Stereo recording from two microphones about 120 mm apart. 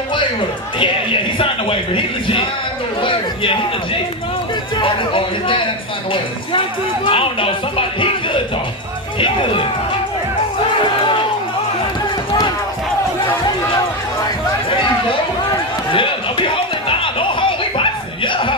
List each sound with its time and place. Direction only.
3.0 s speech: 45° left (ahead or behind)
4.7 s speech: 45° left (ahead or behind)
7.1 s speech: 50° left (ahead or behind)
10.8 s crowd: 45° left (ahead or behind)
15.9 s music: 45° left (ahead or behind)